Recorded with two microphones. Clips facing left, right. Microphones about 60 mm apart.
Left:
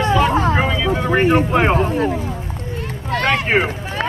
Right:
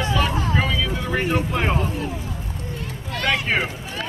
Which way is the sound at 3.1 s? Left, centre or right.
Left.